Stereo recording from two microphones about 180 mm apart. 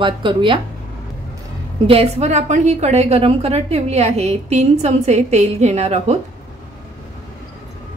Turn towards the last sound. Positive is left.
turn(degrees=-35)  # may be behind; listen again after turning